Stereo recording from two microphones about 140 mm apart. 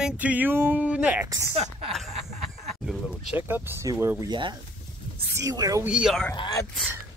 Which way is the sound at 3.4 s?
15° right (ahead or behind).